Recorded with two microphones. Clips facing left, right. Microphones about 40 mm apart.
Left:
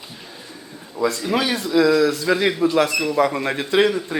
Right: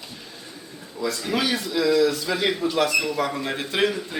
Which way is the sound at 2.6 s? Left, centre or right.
Left.